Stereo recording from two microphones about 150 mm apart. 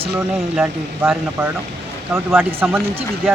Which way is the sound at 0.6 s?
15° right (ahead or behind).